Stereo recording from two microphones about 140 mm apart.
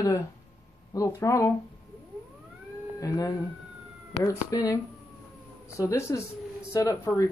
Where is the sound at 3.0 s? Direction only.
25° left (ahead or behind).